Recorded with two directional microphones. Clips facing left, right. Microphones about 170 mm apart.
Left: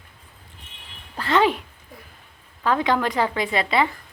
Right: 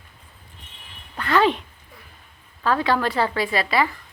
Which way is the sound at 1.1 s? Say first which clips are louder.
Even; 30° left (ahead or behind).